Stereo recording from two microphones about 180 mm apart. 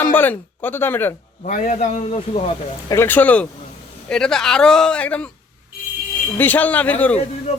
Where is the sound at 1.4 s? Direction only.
45° left (ahead or behind).